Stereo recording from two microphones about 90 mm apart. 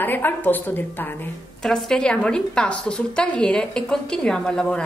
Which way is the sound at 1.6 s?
5° left (ahead or behind).